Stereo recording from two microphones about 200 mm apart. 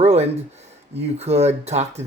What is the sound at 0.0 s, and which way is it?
Speech, 30° right (ahead or behind).